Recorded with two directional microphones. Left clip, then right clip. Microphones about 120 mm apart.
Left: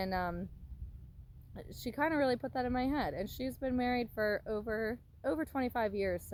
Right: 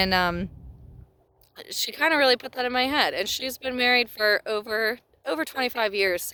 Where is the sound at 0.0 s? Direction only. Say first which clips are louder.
Right 14 dB; 20° right (ahead or behind).